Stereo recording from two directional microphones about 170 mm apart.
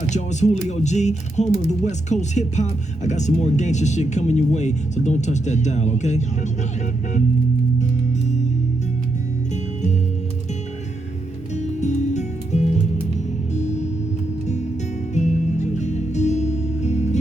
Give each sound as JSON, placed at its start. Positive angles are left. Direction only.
{"t": 0.1, "sound": "speech", "side_deg": 45}
{"t": 11.5, "sound": "music", "side_deg": 45}